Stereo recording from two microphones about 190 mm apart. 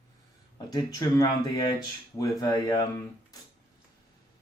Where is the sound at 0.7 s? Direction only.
20° left (ahead or behind).